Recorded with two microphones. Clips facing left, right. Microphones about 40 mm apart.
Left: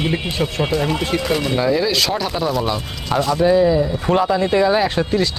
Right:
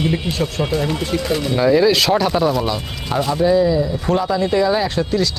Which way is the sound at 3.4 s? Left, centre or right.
Centre.